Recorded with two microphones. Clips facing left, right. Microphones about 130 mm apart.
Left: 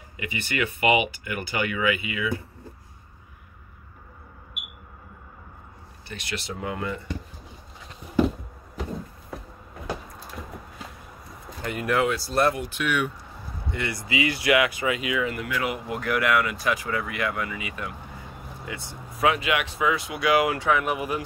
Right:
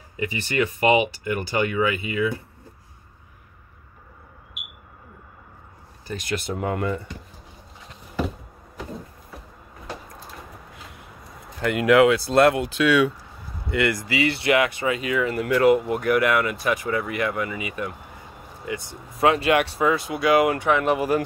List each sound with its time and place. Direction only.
0.2 s speech: 35° right (ahead or behind)
6.0 s speech: 45° right (ahead or behind)
11.6 s speech: 80° right
13.7 s speech: 80° right
14.3 s speech: 30° right (ahead or behind)
15.9 s speech: 25° right (ahead or behind)
19.2 s speech: 40° right (ahead or behind)
20.1 s speech: 25° right (ahead or behind)